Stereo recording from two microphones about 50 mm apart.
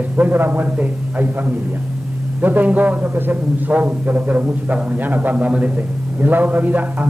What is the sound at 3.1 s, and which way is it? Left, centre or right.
Speech, right.